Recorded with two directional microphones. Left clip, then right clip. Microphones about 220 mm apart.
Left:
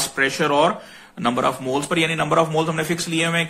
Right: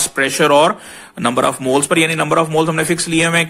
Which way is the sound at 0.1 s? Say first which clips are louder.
Right 8 dB; 45° right (ahead or behind).